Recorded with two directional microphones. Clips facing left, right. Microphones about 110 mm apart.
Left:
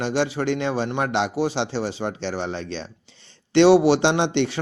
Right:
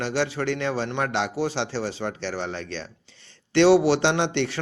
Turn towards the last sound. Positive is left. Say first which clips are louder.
# left 3 dB
turn(degrees=20)  # may be behind; listen again after turning